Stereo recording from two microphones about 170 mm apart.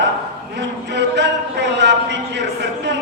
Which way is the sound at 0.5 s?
90° right.